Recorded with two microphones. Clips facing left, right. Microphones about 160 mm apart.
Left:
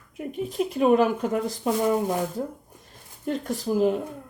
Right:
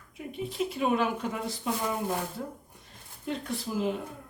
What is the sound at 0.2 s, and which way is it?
Speech, 45° left (ahead or behind).